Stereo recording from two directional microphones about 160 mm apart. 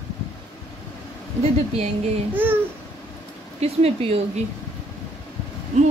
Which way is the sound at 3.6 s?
40° right (ahead or behind).